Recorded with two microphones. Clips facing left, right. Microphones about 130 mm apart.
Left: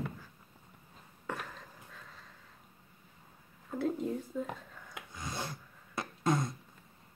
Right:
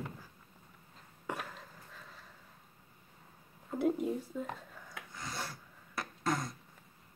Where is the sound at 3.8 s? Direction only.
10° right (ahead or behind).